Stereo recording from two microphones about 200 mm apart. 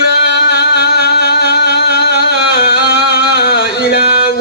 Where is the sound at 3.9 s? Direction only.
50° left (ahead or behind).